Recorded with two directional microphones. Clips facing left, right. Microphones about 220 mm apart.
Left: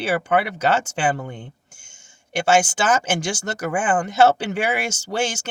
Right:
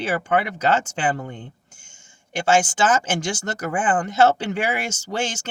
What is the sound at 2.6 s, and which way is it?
Speech, 10° left (ahead or behind).